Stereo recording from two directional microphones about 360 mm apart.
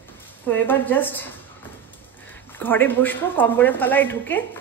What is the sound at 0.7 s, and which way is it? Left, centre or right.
Speech, centre.